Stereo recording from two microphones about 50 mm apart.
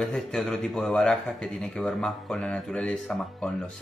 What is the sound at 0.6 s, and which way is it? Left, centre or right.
Speech, centre.